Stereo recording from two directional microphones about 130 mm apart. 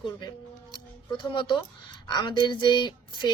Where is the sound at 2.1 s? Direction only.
35° left (ahead or behind).